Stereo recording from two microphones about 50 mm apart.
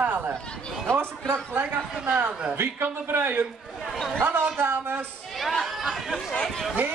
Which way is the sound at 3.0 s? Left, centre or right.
Right.